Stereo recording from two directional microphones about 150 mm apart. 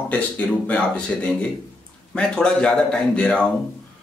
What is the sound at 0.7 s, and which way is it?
Speech, 10° left (ahead or behind).